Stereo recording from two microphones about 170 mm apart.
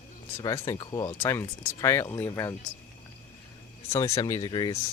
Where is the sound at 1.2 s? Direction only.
15° left (ahead or behind).